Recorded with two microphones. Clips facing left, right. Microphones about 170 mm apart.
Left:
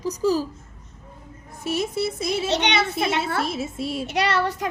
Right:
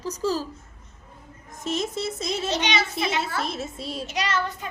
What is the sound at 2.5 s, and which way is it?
Speech, 60° left (ahead or behind).